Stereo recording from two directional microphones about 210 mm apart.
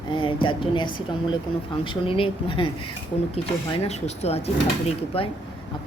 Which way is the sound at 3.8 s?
30° left (ahead or behind).